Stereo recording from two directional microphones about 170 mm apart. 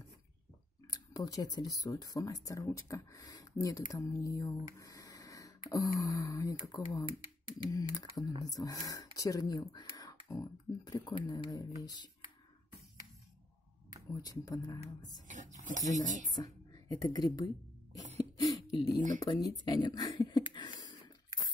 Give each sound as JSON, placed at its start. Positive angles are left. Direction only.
{"t": 0.8, "sound": "a sound", "side_deg": 20}
{"t": 1.8, "sound": "speech", "side_deg": 20}
{"t": 4.7, "sound": "a sound", "side_deg": 20}
{"t": 5.7, "sound": "speech", "side_deg": 20}
{"t": 14.1, "sound": "speech", "side_deg": 20}
{"t": 15.2, "sound": "speech", "side_deg": -50}
{"t": 16.4, "sound": "speech", "side_deg": 20}
{"t": 18.4, "sound": "a sound", "side_deg": 25}
{"t": 19.1, "sound": "speech", "side_deg": 25}